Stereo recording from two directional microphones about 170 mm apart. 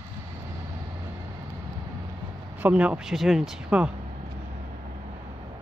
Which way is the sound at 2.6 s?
5° right (ahead or behind).